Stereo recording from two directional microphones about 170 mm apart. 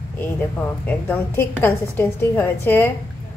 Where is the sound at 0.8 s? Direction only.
10° left (ahead or behind).